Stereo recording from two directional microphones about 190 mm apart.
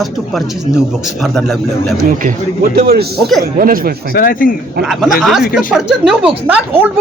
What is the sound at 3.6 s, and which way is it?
Speech, 50° right (ahead or behind).